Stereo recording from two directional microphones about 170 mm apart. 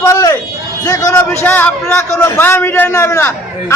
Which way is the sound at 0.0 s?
20° left (ahead or behind).